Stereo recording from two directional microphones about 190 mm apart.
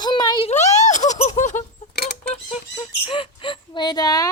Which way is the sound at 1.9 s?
55° left (ahead or behind).